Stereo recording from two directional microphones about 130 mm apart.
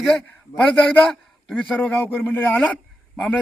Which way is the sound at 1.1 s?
10° left (ahead or behind).